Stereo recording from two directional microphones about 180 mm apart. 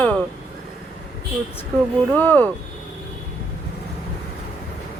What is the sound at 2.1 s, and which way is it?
Speech, 10° left (ahead or behind).